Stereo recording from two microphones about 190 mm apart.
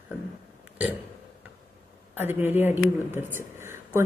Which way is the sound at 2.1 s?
10° right (ahead or behind).